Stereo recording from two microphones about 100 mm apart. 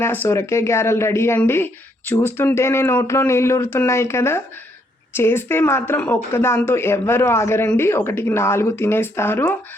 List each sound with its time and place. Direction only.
0.0 s speech: 25° left (ahead or behind)